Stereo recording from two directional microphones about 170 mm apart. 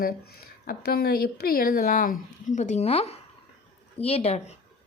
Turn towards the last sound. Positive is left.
turn(degrees=40)  # may be behind; listen again after turning